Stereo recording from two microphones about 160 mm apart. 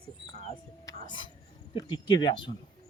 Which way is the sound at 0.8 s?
30° left (ahead or behind).